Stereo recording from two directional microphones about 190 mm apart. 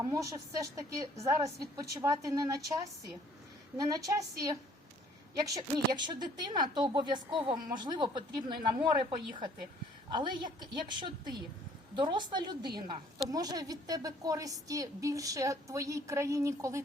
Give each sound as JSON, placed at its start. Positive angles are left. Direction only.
{"t": 0.0, "sound": "a woman's voice", "side_deg": -15}
{"t": 5.5, "sound": "a woman's voice", "side_deg": -20}
{"t": 10.2, "sound": "a woman's voice", "side_deg": -25}